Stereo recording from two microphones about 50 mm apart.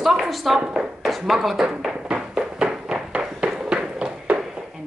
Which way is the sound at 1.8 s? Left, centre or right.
Centre.